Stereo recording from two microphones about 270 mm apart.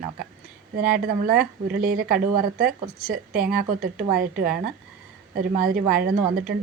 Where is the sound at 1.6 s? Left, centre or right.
Right.